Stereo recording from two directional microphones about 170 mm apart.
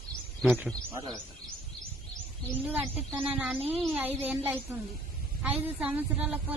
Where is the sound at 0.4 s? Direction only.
5° right (ahead or behind).